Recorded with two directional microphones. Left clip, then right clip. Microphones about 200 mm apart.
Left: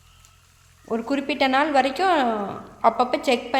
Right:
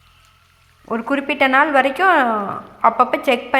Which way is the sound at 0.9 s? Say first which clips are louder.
Right 5 dB; 5° right (ahead or behind).